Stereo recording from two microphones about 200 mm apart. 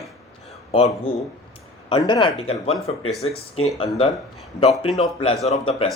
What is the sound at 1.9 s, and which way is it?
Speech, 25° left (ahead or behind).